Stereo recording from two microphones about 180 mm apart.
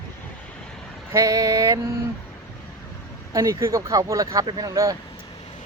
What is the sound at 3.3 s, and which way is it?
Speech, 20° right (ahead or behind).